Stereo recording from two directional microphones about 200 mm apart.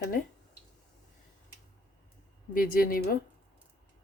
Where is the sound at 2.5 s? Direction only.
45° left (ahead or behind).